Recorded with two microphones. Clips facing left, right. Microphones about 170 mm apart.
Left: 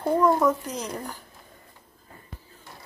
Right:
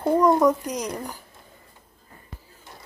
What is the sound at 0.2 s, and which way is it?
Speech, 15° right (ahead or behind).